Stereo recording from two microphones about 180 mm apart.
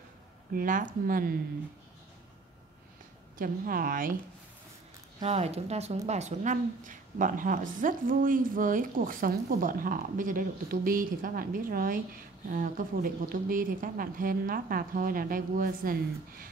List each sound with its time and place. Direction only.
0.6 s speech: 45° right (ahead or behind)
3.3 s speech: 55° right (ahead or behind)
5.2 s speech: 35° right (ahead or behind); by 16.4 s 50° right (ahead or behind)